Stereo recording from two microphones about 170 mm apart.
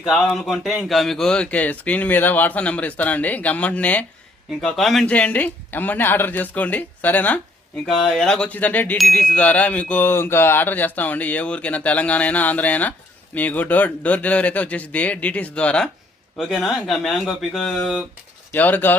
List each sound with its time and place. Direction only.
0.1 s chime: centre (ahead or behind)
16.4 s speech: centre (ahead or behind)
18.5 s chime: 10° left (ahead or behind)